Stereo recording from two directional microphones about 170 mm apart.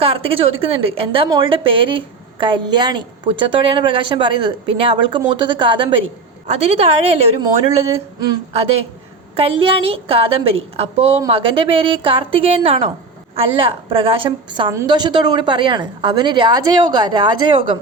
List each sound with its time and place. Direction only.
0.0 s a woman's voice: 35° right (ahead or behind)
9.3 s a woman's voice: 35° right (ahead or behind)